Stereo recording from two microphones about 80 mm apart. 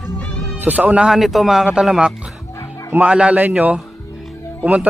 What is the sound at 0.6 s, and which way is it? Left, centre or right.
Speech, centre.